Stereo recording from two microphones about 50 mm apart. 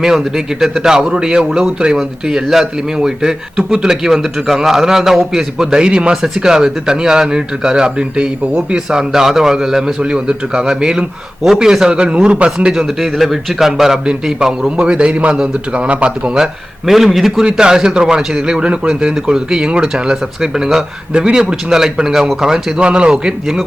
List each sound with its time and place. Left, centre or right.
0.0 s a man's voice: centre
12.7 s speech: centre; by 16.4 s right
16.4 s speech: centre
17.4 s a man's voice: centre